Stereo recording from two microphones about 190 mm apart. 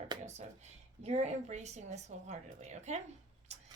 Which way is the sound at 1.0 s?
35° right (ahead or behind).